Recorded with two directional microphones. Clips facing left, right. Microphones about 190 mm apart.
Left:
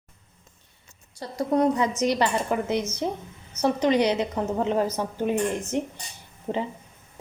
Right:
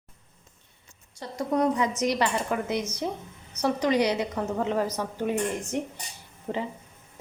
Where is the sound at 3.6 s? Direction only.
25° left (ahead or behind).